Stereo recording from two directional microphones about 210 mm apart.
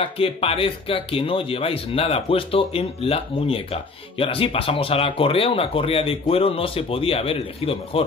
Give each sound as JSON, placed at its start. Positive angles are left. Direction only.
{"t": 0.0, "sound": "speech", "side_deg": 25}